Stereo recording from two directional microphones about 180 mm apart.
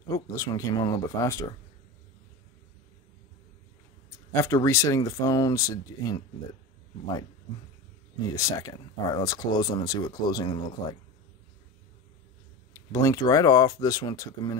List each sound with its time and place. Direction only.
0.1 s speech: 20° left (ahead or behind)
4.3 s speech: 15° left (ahead or behind)
8.4 s speech: 20° left (ahead or behind)
12.7 s speech: 20° left (ahead or behind)